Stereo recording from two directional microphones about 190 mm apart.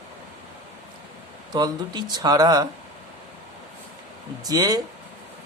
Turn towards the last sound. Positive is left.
turn(degrees=-20)  # may be behind; listen again after turning